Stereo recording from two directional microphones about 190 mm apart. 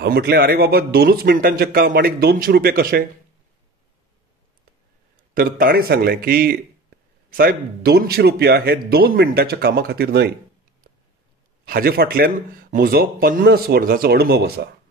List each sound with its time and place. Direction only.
0.0 s speech: 55° right (ahead or behind)
5.3 s a man's voice: 50° right (ahead or behind)
11.6 s speech: 50° right (ahead or behind)